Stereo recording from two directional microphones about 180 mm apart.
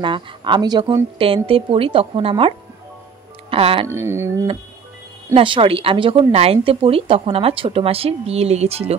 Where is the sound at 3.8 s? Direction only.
15° right (ahead or behind).